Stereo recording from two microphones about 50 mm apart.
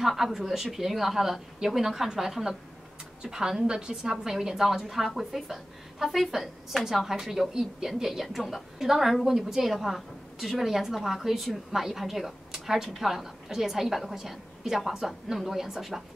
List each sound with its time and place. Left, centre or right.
0.0 s a woman's voice: centre